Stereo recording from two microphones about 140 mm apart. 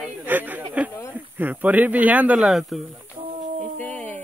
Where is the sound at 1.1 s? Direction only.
10° right (ahead or behind).